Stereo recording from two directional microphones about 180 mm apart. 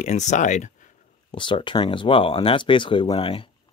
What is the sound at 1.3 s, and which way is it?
Speech, 25° left (ahead or behind).